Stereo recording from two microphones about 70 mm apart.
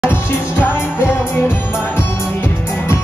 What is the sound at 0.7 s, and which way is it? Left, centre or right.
Music, left.